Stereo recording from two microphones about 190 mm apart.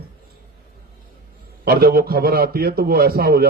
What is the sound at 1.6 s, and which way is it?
A man's voice, 50° right (ahead or behind).